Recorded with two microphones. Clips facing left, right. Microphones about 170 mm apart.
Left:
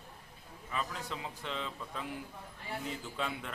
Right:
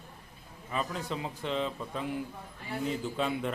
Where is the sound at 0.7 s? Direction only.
30° right (ahead or behind).